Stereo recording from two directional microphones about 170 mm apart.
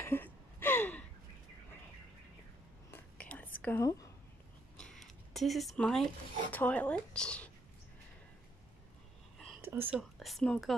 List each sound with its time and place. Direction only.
0.0 s gasp: 10° left (ahead or behind)
2.9 s whispering: 10° left (ahead or behind)
3.6 s speech: 15° left (ahead or behind)
4.7 s a sound: 5° left (ahead or behind)
6.5 s speech: 10° left (ahead or behind)
9.6 s speech: 15° right (ahead or behind); by 10.7 s 5° left (ahead or behind)